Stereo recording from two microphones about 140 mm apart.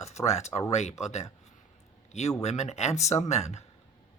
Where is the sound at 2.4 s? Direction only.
50° left (ahead or behind).